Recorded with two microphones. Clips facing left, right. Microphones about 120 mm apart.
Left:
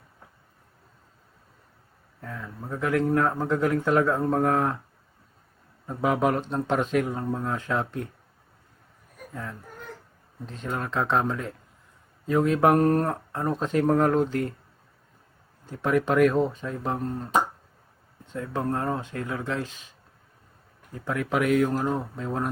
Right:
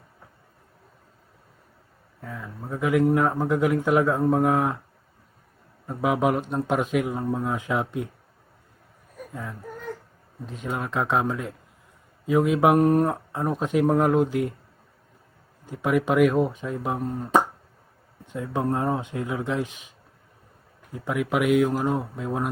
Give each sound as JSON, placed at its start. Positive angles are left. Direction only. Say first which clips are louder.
{"t": 2.2, "sound": "a man's voice", "louder": "right 1 dB", "side_deg": -5}
{"t": 5.9, "sound": "a man's voice", "louder": "right 1 dB", "side_deg": -5}
{"t": 9.3, "sound": "a man's voice", "louder": "right 2 dB", "side_deg": -5}
{"t": 15.6, "sound": "a man's voice", "louder": "right 1 dB", "side_deg": -10}
{"t": 18.3, "sound": "a man's voice", "louder": "right 2 dB", "side_deg": -15}
{"t": 20.9, "sound": "a man's voice", "louder": "right 2 dB", "side_deg": -10}